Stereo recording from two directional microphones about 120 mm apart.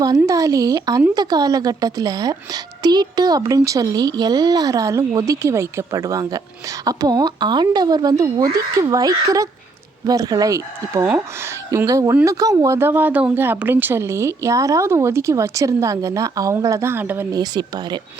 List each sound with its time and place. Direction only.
0.3 s a woman's voice: 30° right (ahead or behind)
17.3 s a woman's voice: 35° right (ahead or behind)